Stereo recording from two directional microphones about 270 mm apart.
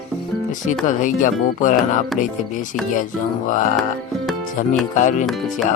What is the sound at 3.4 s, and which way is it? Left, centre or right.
Speech, left.